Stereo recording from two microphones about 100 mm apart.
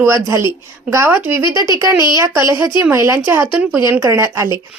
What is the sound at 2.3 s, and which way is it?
Speech, 30° right (ahead or behind).